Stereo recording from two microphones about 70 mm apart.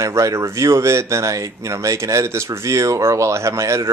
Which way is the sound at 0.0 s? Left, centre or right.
Right.